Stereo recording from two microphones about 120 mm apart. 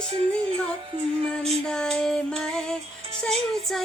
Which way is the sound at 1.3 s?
5° left (ahead or behind).